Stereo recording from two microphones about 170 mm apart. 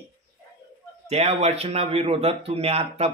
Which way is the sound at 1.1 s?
40° right (ahead or behind).